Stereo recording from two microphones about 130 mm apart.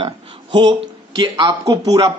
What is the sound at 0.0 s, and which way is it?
A man's voice, 35° right (ahead or behind).